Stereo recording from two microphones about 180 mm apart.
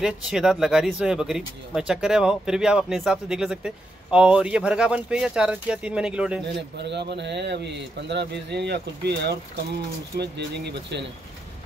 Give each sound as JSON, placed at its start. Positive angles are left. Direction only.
{"t": 0.0, "sound": "speech", "side_deg": -5}
{"t": 6.8, "sound": "speech", "side_deg": -70}